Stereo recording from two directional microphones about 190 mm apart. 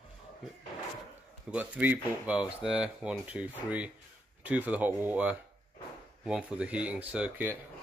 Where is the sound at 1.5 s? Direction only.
10° right (ahead or behind).